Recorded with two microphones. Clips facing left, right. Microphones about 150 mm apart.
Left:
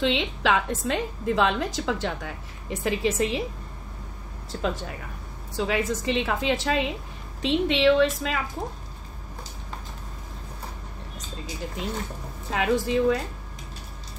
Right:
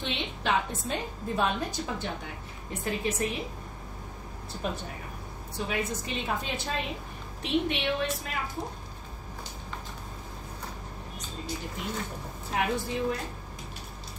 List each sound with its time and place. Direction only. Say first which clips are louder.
0.0 s a woman's voice: left 8 dB; 90° left
4.5 s a woman's voice: left 6 dB; 90° left
12.4 s a woman's voice: left 6 dB; 90° left